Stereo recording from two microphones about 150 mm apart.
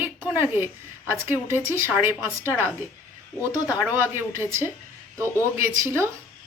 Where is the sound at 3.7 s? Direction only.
10° right (ahead or behind).